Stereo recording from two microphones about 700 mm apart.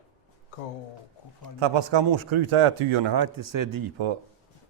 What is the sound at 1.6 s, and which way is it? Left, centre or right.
A man's voice, right.